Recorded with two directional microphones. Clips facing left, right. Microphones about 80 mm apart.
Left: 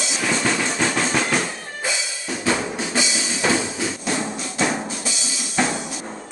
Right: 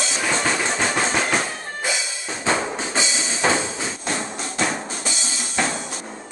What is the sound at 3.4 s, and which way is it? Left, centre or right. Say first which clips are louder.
Music: even; right.